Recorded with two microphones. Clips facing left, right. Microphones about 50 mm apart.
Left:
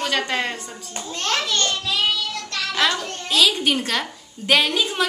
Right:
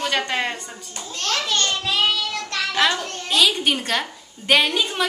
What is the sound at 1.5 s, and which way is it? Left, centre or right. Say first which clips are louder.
Speech: right 1 dB; right.